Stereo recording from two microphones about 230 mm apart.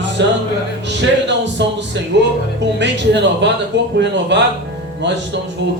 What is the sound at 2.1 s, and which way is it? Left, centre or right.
A man's voice, right.